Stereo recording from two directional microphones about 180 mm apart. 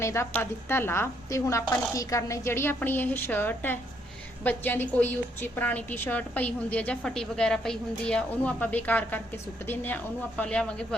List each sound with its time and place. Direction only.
0.0 s a woman's voice: 15° left (ahead or behind)